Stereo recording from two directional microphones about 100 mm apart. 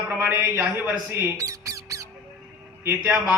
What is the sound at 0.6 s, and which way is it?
Speech, 15° right (ahead or behind).